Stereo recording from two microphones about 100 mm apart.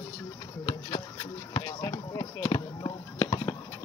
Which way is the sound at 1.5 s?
35° left (ahead or behind).